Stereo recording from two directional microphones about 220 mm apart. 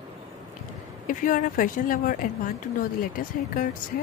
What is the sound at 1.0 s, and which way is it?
Speech, 35° left (ahead or behind).